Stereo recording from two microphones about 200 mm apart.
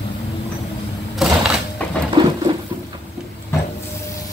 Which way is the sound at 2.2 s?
25° right (ahead or behind).